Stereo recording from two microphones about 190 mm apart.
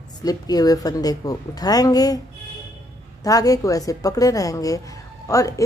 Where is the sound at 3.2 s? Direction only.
20° left (ahead or behind).